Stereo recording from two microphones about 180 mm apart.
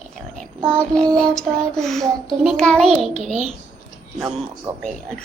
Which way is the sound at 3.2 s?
40° right (ahead or behind).